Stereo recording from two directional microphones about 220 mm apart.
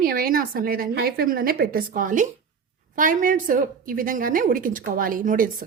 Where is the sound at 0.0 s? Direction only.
40° right (ahead or behind).